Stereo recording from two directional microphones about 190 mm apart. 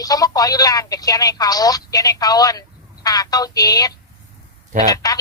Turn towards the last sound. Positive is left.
turn(degrees=20)  # may be behind; listen again after turning